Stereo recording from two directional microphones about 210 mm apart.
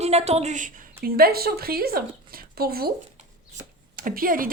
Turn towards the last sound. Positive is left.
turn(degrees=-40)  # may be behind; listen again after turning